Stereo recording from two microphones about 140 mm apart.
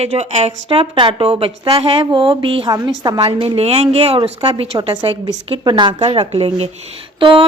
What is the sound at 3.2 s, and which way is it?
A woman's voice, 45° right (ahead or behind).